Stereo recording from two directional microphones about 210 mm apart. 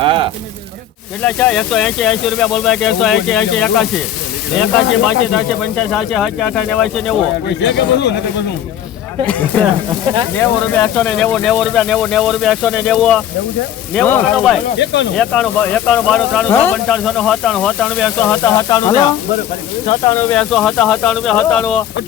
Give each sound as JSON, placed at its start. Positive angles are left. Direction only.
{"t": 0.0, "sound": "a sound", "side_deg": -25}
{"t": 1.2, "sound": "speech", "side_deg": 5}
{"t": 7.6, "sound": "speech", "side_deg": 55}
{"t": 10.3, "sound": "speech", "side_deg": 10}
{"t": 18.5, "sound": "speech", "side_deg": 15}
{"t": 20.1, "sound": "speech", "side_deg": 5}